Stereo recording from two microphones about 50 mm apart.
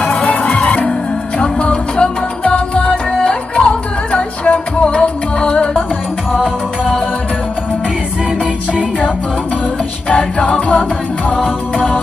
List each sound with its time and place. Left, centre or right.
0.0 s music: left
6.3 s music: centre
10.0 s music: left